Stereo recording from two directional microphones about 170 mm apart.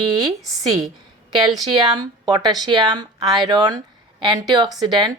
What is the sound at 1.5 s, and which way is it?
Speech, 25° right (ahead or behind).